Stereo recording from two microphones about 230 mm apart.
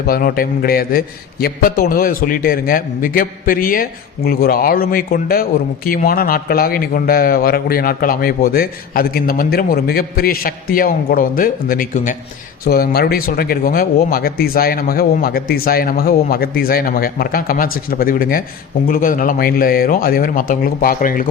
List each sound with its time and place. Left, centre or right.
0.0 s a man's voice: left